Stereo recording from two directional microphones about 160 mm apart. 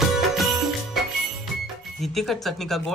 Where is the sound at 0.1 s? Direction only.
Centre (ahead or behind).